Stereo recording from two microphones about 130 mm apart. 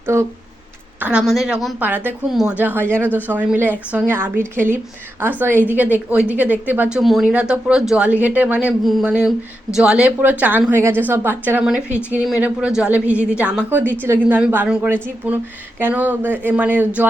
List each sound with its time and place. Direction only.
0.0 s speech: 20° right (ahead or behind)
0.9 s a sound: 10° right (ahead or behind)
1.2 s a woman's voice: centre (ahead or behind)
1.8 s speech: 15° right (ahead or behind)